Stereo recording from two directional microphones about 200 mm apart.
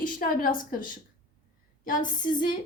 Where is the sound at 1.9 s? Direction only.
40° left (ahead or behind).